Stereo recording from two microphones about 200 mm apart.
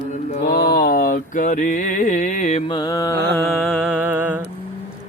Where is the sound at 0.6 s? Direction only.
50° left (ahead or behind).